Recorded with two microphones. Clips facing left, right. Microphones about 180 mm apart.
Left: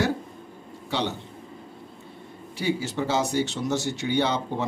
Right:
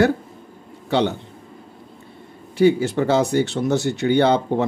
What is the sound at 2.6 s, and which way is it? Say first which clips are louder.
Speech: right 10 dB; 55° right (ahead or behind).